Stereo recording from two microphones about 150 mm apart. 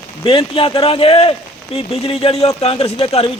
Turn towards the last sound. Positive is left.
turn(degrees=40)  # may be behind; listen again after turning